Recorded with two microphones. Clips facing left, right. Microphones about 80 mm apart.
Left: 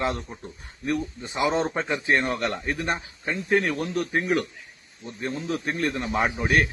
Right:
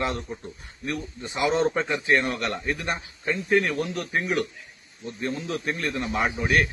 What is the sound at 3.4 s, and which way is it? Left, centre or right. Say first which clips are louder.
A man's voice: even; left.